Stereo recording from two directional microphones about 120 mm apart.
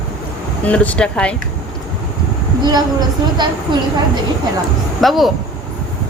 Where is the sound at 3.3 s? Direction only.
40° right (ahead or behind).